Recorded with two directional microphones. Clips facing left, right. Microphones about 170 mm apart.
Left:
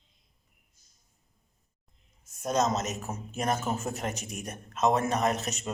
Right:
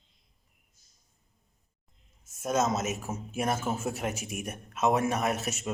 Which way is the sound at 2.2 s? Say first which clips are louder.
Even; 5° right (ahead or behind).